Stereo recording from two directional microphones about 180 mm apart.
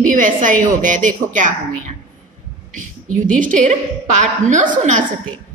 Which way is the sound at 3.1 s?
45° right (ahead or behind).